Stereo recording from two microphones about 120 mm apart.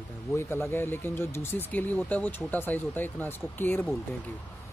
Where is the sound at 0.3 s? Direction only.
20° left (ahead or behind).